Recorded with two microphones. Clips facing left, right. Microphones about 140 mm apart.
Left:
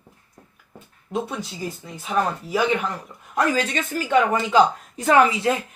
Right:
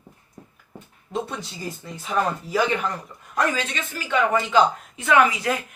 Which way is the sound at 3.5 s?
45° left (ahead or behind).